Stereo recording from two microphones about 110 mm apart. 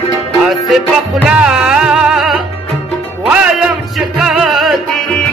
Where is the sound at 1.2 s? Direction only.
5° right (ahead or behind).